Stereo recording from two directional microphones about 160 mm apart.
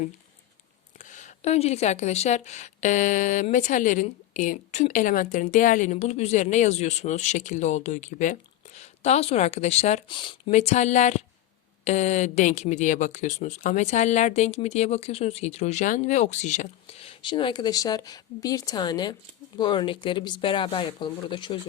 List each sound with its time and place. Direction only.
0.9 s speech: 50° left (ahead or behind)
10.1 s speech: 30° left (ahead or behind)
10.5 s speech: 45° left (ahead or behind)